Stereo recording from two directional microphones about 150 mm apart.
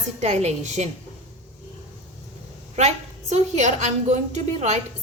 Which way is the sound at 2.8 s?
50° right (ahead or behind).